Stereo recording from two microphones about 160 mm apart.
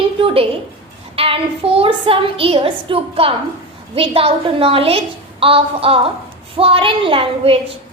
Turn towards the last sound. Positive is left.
turn(degrees=-35)  # may be behind; listen again after turning